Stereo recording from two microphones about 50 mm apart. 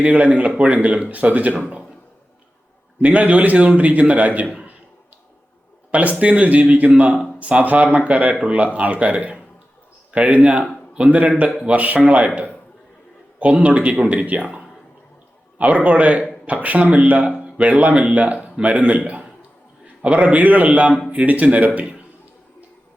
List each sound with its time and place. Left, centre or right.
0.0 s a man's voice: right
3.0 s a man's voice: right
5.9 s a man's voice: right
13.4 s a man's voice: right
17.2 s a sound: centre
17.6 s a man's voice: right